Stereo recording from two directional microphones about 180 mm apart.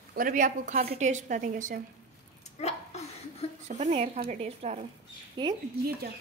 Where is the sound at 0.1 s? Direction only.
50° right (ahead or behind).